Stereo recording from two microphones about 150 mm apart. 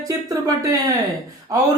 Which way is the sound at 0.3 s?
25° right (ahead or behind).